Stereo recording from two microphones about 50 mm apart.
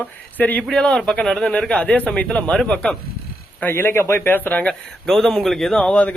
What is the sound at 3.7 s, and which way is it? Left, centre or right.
Speech, left.